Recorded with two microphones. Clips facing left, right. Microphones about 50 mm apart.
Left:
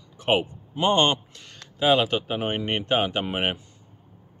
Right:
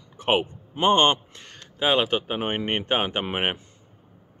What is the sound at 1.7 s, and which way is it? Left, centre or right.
Speech, centre.